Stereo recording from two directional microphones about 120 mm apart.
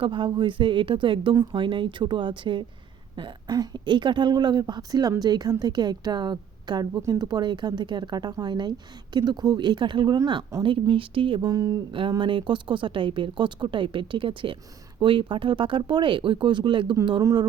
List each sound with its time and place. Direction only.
0.0 s a woman's voice: 45° right (ahead or behind)
11.4 s a woman's voice: 30° right (ahead or behind)
11.9 s a woman's voice: 45° right (ahead or behind)